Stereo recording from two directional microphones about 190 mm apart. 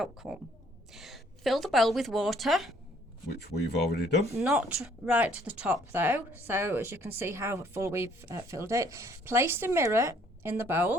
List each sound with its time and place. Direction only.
0.0 s speech: centre (ahead or behind)
3.4 s speech: 60° left (ahead or behind)
4.4 s a woman's voice: 5° right (ahead or behind)